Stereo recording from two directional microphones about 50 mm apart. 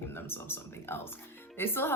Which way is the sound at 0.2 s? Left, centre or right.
Left.